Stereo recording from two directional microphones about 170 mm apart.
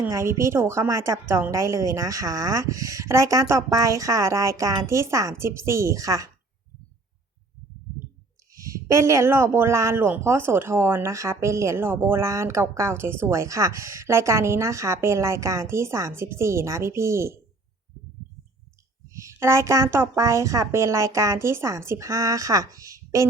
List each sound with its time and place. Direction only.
0.0 s a woman's voice: 15° right (ahead or behind)
8.5 s a woman's voice: 20° right (ahead or behind)
19.1 s a woman's voice: 15° right (ahead or behind)